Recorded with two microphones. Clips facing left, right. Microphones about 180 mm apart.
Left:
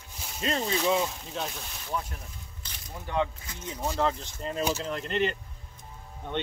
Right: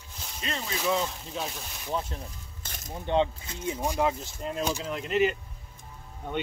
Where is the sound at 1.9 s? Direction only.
25° right (ahead or behind).